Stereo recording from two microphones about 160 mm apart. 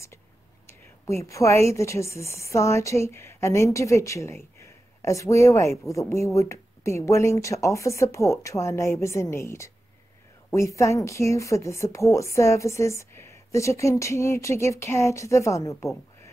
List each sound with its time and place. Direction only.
1.0 s a woman's voice: 20° left (ahead or behind)